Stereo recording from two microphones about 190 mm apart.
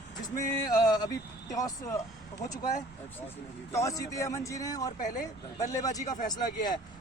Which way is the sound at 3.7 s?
15° left (ahead or behind).